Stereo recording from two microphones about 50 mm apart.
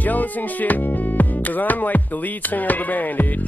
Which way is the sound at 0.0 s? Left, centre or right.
Left.